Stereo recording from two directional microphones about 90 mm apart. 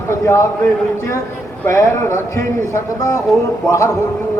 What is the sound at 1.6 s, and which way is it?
Speech, 30° left (ahead or behind).